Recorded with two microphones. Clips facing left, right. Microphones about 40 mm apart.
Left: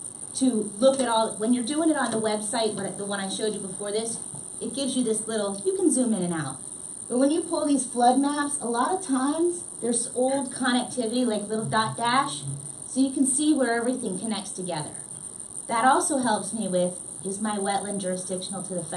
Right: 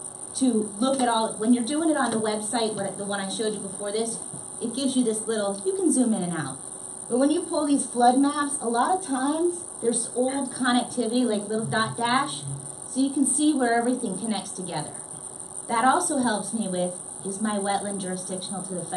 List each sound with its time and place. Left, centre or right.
0.4 s a woman's voice: centre